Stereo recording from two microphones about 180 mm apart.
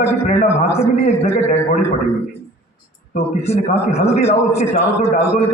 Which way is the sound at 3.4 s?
35° left (ahead or behind).